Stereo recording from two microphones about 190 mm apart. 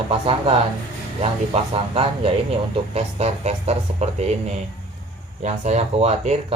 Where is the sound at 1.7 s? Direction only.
30° right (ahead or behind).